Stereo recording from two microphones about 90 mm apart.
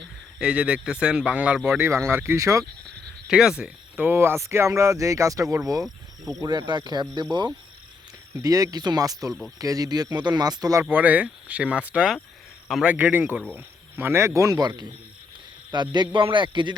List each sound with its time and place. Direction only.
0.3 s speech: 10° right (ahead or behind)
2.3 s speech: 35° right (ahead or behind)
3.2 s speech: 5° right (ahead or behind)
4.0 s speech: 25° right (ahead or behind); by 5.9 s 40° right (ahead or behind)
6.4 s speech: 55° right (ahead or behind)
8.4 s speech: 40° right (ahead or behind)
10.9 s speech: 15° right (ahead or behind); by 14.6 s 35° right (ahead or behind)
14.6 s speech: 50° right (ahead or behind)